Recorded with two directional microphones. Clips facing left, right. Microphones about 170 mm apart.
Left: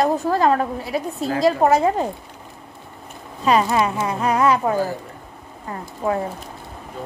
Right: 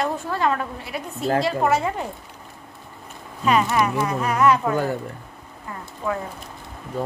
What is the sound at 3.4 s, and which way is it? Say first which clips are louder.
Speech: left 2 dB; 30° left (ahead or behind).